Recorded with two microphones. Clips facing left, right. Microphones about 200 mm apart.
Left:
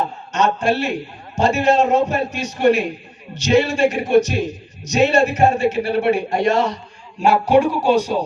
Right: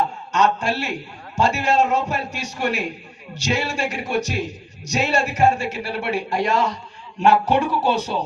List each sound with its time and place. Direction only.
0.3 s a woman's voice: 20° left (ahead or behind)
7.2 s speech: 10° left (ahead or behind)